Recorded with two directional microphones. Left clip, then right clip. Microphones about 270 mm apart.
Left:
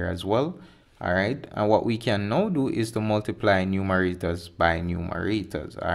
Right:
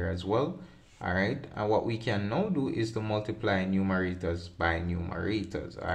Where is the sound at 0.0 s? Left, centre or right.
Left.